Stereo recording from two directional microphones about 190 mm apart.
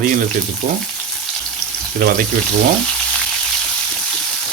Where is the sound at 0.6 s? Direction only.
40° right (ahead or behind).